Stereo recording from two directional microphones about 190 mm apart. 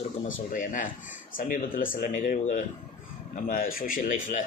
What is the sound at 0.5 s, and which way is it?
Speech, 45° left (ahead or behind).